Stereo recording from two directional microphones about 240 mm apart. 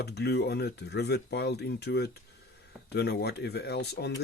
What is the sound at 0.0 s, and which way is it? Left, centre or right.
Speech, left.